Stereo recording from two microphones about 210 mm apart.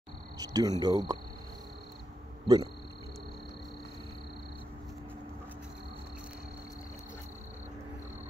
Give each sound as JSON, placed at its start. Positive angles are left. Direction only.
{"t": 0.4, "sound": "cricket", "side_deg": -15}
{"t": 2.4, "sound": "speech", "side_deg": -20}